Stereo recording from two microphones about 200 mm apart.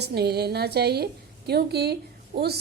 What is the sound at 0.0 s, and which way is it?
A woman's voice, 55° right (ahead or behind).